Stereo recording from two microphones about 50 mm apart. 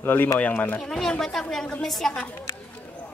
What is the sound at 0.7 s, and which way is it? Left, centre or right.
Speech, centre.